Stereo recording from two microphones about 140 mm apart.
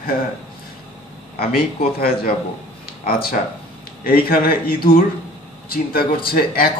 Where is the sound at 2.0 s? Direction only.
90° left.